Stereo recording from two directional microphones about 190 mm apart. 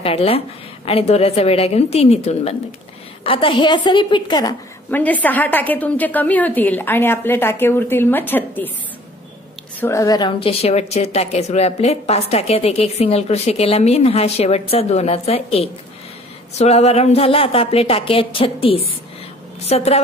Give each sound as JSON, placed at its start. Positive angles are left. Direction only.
{"t": 0.0, "sound": "a woman's voice", "side_deg": 30}
{"t": 4.9, "sound": "a woman's voice", "side_deg": 10}
{"t": 9.8, "sound": "a woman's voice", "side_deg": 15}